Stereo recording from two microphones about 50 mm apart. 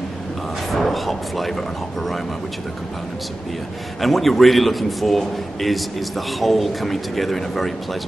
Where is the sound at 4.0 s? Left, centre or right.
Centre.